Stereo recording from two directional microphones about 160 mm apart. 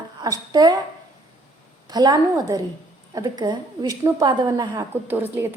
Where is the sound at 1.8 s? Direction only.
25° right (ahead or behind).